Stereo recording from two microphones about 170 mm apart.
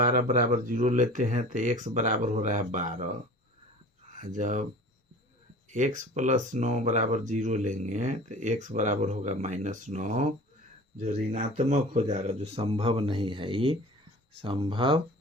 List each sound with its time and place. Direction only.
0.0 s speech: 50° right (ahead or behind)
4.2 s speech: 45° right (ahead or behind)
6.0 s speech: 45° right (ahead or behind); by 15.0 s 30° right (ahead or behind)